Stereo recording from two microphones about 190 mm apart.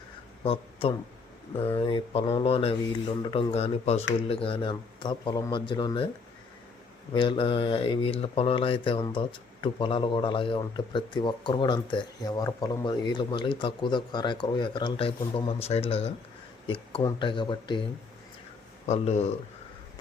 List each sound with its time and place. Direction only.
0.4 s speech: 30° left (ahead or behind)
7.1 s speech: 25° left (ahead or behind)
18.9 s speech: 35° left (ahead or behind)